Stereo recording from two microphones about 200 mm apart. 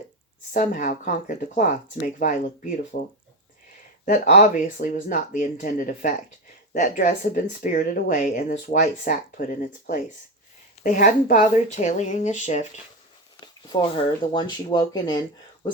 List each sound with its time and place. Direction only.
0.5 s speech: 40° left (ahead or behind)
13.4 s speech: 25° left (ahead or behind)